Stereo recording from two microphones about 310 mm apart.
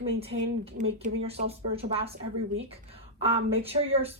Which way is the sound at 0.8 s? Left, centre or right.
Right.